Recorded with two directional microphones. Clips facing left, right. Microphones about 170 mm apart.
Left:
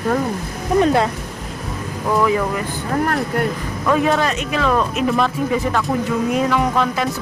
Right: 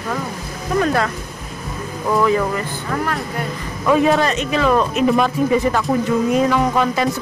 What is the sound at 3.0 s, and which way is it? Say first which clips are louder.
Speech: left 4 dB; 50° left (ahead or behind).